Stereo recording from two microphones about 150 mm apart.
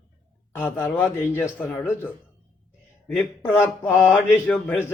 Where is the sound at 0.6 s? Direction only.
15° left (ahead or behind).